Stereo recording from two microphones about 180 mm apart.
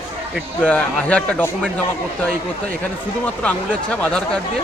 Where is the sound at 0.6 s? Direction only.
10° left (ahead or behind).